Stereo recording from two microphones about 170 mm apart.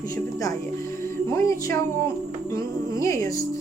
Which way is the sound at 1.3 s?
15° left (ahead or behind).